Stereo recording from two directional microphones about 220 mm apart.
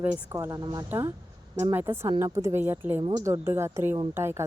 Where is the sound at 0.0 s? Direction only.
10° right (ahead or behind).